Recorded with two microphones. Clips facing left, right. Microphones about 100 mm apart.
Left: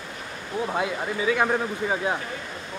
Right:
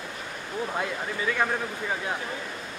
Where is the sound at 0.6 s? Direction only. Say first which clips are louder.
Left 4 dB; 10° left (ahead or behind).